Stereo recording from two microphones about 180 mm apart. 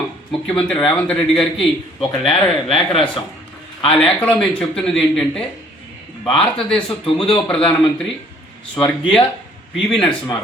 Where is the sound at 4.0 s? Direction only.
5° left (ahead or behind).